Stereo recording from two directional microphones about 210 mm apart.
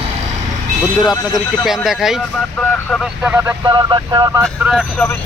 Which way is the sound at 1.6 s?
Centre (ahead or behind).